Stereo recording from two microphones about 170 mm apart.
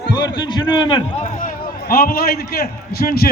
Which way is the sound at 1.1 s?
45° left (ahead or behind).